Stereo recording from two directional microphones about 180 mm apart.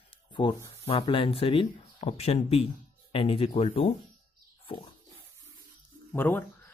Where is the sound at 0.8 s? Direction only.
30° left (ahead or behind).